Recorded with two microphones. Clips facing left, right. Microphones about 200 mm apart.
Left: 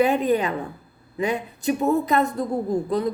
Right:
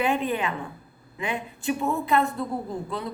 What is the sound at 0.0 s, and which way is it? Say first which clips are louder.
A woman's voice: left 6 dB; 40° left (ahead or behind).